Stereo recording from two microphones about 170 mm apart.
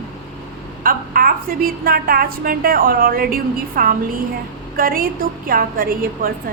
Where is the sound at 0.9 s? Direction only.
55° right (ahead or behind).